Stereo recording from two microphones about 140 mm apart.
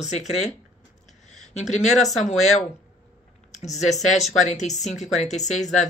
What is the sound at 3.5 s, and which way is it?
Speech, 55° left (ahead or behind).